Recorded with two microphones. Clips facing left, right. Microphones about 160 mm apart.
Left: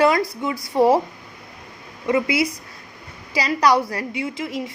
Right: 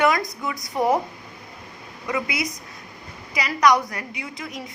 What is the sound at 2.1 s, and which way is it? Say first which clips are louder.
A woman's voice: left 7 dB; 30° left (ahead or behind).